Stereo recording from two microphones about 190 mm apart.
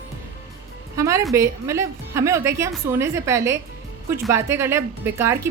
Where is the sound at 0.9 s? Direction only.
15° right (ahead or behind).